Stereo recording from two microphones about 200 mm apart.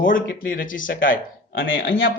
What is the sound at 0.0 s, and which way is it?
Speech, 45° left (ahead or behind).